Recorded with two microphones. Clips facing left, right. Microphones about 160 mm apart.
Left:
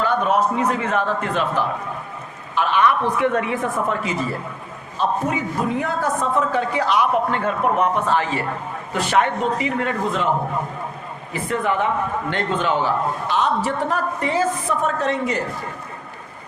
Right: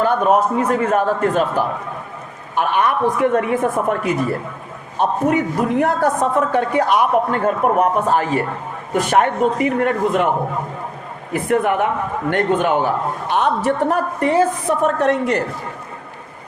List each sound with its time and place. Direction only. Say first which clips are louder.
0.0 s a man's voice: right 4 dB; 45° right (ahead or behind); by 6.1 s 65° right (ahead or behind)
6.5 s a man's voice: right 4 dB; 55° right (ahead or behind)
11.3 s a man's voice: right 5 dB; 55° right (ahead or behind)